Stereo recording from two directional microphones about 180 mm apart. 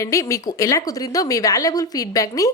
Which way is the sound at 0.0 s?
15° left (ahead or behind).